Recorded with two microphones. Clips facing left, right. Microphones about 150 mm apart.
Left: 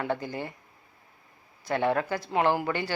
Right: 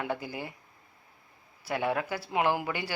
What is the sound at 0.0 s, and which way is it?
Speech, 10° right (ahead or behind).